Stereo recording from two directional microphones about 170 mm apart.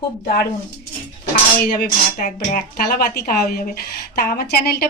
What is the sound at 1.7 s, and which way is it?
Speech, 50° left (ahead or behind).